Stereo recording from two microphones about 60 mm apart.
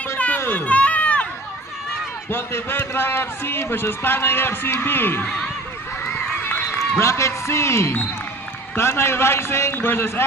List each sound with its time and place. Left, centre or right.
0.3 s a sound: left
2.3 s a man's voice: left
5.2 s speech: centre
6.4 s run: left
7.0 s a man's voice: left